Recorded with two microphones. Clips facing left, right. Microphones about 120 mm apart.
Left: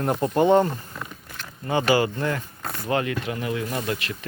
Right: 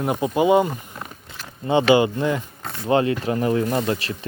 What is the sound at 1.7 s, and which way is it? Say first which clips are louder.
Speech: right 5 dB; 20° right (ahead or behind).